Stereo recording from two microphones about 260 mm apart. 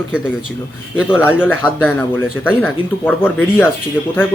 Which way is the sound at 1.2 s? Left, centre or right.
Centre.